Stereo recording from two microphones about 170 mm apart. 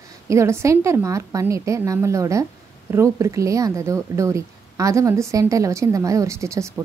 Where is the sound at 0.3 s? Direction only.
15° right (ahead or behind).